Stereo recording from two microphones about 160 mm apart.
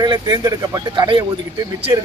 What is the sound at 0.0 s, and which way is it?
Speech, 25° right (ahead or behind).